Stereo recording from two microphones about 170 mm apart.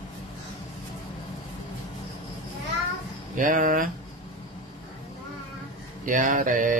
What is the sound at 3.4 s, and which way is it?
Speech, 50° right (ahead or behind).